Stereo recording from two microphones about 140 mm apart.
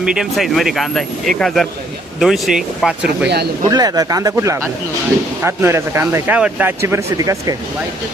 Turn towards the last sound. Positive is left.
turn(degrees=-25)  # may be behind; listen again after turning